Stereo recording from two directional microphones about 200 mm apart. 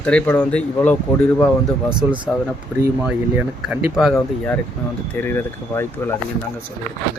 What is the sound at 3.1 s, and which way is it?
Speech, 5° right (ahead or behind).